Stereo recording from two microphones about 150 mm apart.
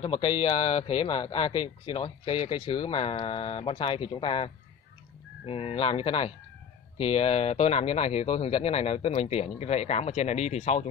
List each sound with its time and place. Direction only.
0.0 s speech: 35° left (ahead or behind)
5.5 s speech: 40° left (ahead or behind)